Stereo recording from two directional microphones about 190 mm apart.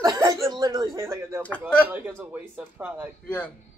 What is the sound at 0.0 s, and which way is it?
Chuckle, 20° right (ahead or behind).